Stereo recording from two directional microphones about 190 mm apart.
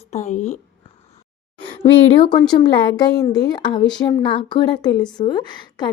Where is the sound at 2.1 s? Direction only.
25° left (ahead or behind).